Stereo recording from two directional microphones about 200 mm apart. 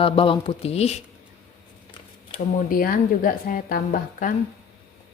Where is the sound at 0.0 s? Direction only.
25° left (ahead or behind).